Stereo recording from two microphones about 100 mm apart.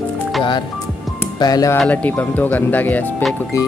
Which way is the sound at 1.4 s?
40° left (ahead or behind).